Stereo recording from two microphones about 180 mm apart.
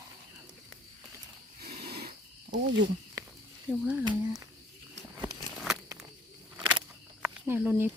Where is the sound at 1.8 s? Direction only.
60° right (ahead or behind).